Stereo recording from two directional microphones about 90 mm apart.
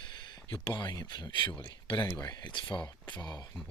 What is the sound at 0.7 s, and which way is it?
Speech, 60° left (ahead or behind).